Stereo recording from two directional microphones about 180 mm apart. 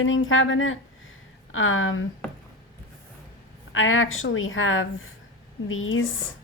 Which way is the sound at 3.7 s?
90° left.